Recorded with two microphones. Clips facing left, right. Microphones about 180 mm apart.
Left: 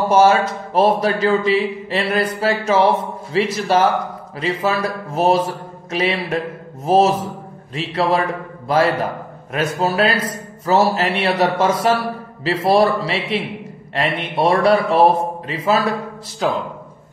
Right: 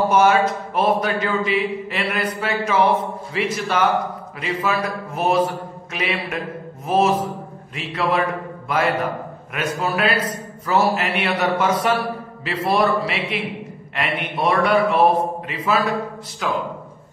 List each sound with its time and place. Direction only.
0.1 s a man's voice: 30° left (ahead or behind)
7.7 s a man's voice: 30° left (ahead or behind)